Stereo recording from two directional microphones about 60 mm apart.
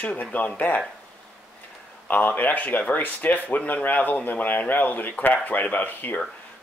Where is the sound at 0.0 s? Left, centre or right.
Left.